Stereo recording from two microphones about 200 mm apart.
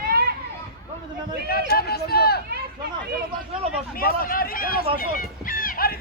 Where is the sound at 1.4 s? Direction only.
50° left (ahead or behind).